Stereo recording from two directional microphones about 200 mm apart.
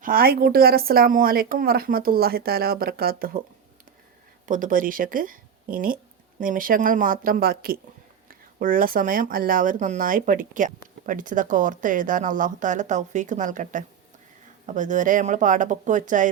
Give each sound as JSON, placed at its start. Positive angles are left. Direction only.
{"t": 0.0, "sound": "a woman's voice", "side_deg": -45}
{"t": 4.4, "sound": "a woman's voice", "side_deg": -40}